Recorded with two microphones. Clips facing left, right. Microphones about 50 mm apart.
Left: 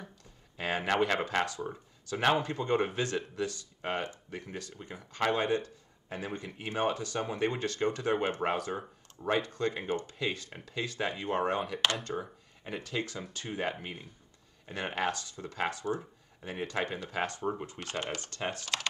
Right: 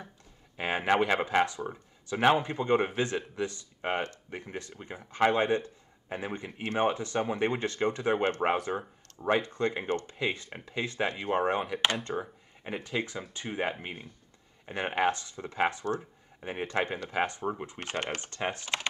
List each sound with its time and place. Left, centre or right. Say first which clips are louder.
0.6 s speech: right 3 dB; right
17.9 s speech: right 2 dB; right
18.2 s speech: right 3 dB; right